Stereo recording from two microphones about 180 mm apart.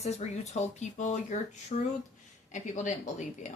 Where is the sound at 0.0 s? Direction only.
35° left (ahead or behind).